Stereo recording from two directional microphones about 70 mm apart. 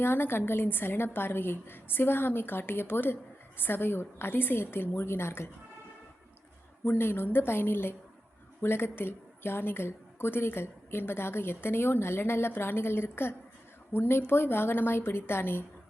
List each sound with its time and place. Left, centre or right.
0.0 s a woman's voice: left
6.8 s a woman's voice: left